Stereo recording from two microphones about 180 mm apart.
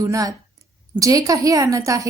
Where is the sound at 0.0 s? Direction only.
20° right (ahead or behind).